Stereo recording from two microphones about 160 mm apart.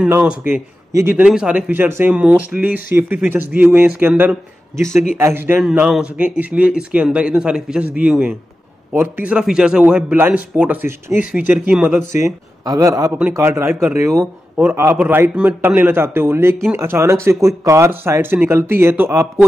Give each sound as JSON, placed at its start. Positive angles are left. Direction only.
{"t": 0.0, "sound": "a man's voice", "side_deg": -5}
{"t": 5.6, "sound": "a man's voice", "side_deg": -5}
{"t": 12.6, "sound": "a man's voice", "side_deg": -20}